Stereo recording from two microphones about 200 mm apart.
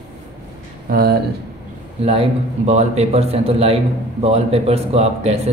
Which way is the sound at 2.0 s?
30° right (ahead or behind).